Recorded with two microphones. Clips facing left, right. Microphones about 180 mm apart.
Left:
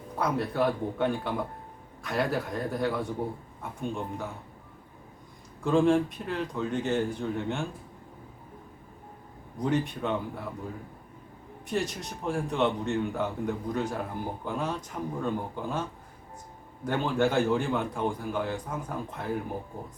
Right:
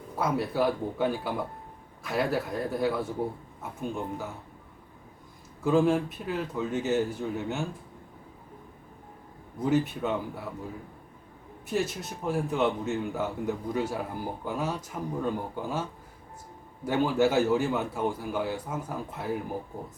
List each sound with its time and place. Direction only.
0.2 s a man's voice: 5° right (ahead or behind)
5.6 s a man's voice: 5° right (ahead or behind)
9.6 s a man's voice: 5° right (ahead or behind)
11.7 s a man's voice: 5° right (ahead or behind)